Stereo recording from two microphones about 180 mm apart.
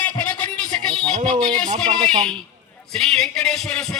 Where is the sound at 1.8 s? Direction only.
5° left (ahead or behind).